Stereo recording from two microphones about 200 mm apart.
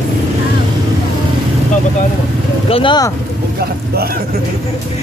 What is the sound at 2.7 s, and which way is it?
Speech, 25° left (ahead or behind).